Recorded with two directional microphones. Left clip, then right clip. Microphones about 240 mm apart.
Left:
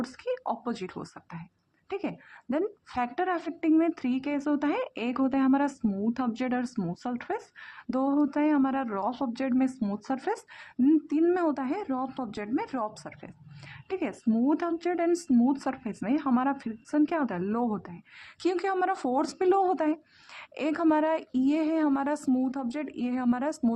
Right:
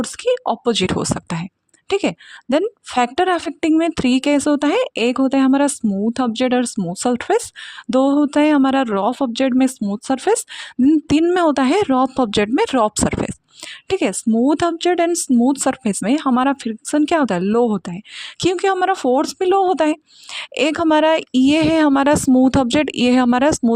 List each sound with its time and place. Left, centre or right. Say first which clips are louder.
0.0 s speech: right 14 dB; right